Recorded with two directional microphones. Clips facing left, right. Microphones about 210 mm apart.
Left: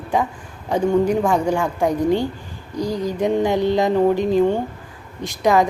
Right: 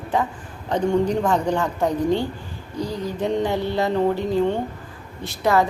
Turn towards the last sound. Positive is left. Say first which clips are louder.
# left 3 dB
turn(degrees=15)  # may be behind; listen again after turning